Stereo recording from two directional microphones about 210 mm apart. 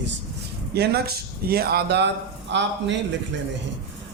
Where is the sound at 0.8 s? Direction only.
50° right (ahead or behind).